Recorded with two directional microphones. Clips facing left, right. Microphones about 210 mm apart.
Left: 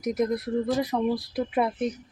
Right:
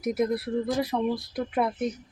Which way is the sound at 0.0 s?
5° right (ahead or behind).